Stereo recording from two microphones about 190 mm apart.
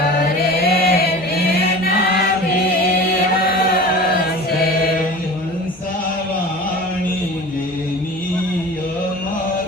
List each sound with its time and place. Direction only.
0.6 s chant: 55° left (ahead or behind)